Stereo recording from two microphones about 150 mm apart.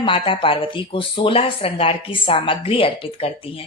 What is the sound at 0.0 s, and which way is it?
Speech, 35° left (ahead or behind).